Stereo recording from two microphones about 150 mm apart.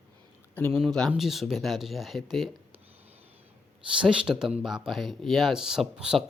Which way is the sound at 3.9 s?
5° right (ahead or behind).